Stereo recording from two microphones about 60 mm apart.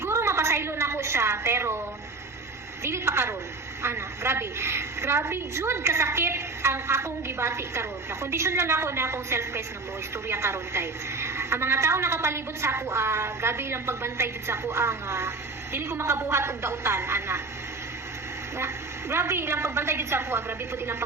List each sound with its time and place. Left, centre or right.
0.0 s a sound: right
2.8 s a woman's voice: right
18.5 s a woman's voice: right